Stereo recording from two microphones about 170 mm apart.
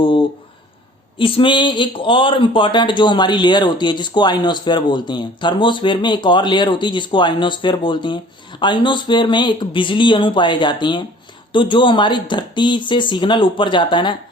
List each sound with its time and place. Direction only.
1.2 s speech: 30° left (ahead or behind)